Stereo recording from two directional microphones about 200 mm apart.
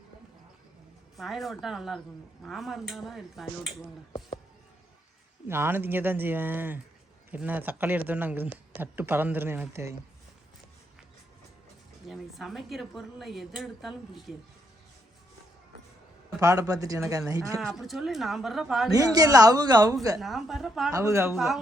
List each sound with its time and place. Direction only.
1.1 s speech: centre (ahead or behind)
3.7 s speech: 30° left (ahead or behind)
5.5 s a woman's voice: 10° right (ahead or behind)
12.0 s speech: centre (ahead or behind)
16.4 s a woman's voice: 15° right (ahead or behind)
17.6 s speech: centre (ahead or behind)
18.9 s a woman's voice: 20° right (ahead or behind)
20.1 s speech: centre (ahead or behind)
20.9 s a woman's voice: 15° right (ahead or behind)
21.3 s speech: centre (ahead or behind)